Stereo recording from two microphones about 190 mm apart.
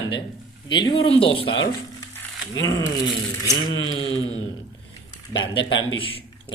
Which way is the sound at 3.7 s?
90° left.